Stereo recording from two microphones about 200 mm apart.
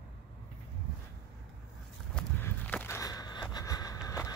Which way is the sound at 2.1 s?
10° left (ahead or behind).